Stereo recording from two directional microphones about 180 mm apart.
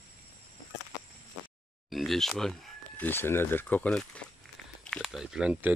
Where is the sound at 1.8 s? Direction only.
Centre (ahead or behind).